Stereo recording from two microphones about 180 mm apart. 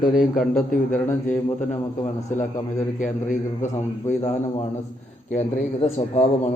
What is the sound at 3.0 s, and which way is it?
A man's voice, 45° left (ahead or behind).